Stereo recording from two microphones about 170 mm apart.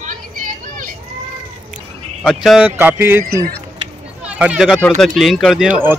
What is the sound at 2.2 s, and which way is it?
Speech, centre (ahead or behind).